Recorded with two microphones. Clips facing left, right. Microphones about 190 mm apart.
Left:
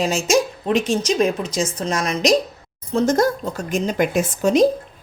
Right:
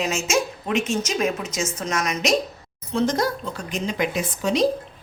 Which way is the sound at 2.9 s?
45° left (ahead or behind).